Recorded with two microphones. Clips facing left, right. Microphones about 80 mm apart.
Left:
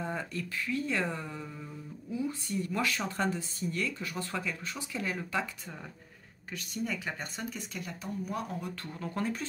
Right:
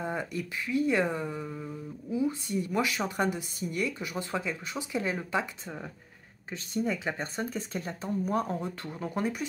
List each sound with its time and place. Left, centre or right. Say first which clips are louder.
0.0 s speech: right 3 dB; centre